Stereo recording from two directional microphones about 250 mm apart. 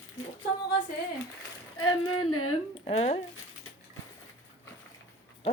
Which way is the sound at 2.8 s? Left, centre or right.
Left.